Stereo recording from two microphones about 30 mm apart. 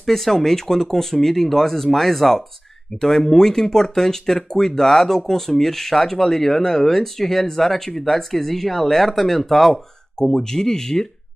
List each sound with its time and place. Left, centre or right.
0.0 s speech: centre
10.2 s speech: centre